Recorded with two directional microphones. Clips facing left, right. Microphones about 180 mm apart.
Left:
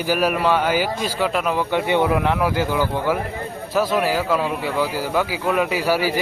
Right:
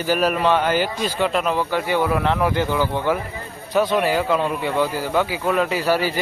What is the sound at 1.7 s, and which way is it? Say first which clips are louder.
Speech: left 4 dB; 20° left (ahead or behind).